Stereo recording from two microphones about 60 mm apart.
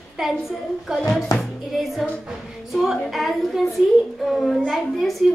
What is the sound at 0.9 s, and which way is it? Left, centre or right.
Hands, centre.